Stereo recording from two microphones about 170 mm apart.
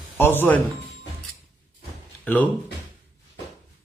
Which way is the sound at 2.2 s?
10° left (ahead or behind).